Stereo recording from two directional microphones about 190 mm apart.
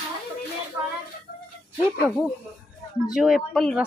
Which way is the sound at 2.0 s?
5° right (ahead or behind).